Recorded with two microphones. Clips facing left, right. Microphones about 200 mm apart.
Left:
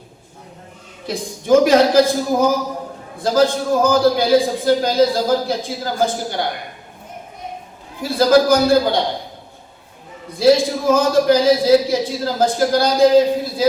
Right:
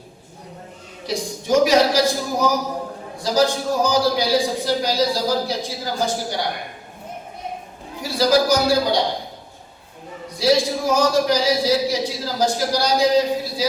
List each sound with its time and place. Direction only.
1.0 s a man's voice: 55° left (ahead or behind)
8.0 s a man's voice: 55° left (ahead or behind)
10.3 s a man's voice: 55° left (ahead or behind)